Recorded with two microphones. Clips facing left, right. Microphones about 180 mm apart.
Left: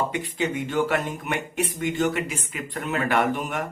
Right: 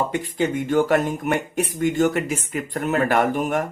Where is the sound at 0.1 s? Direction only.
45° right (ahead or behind).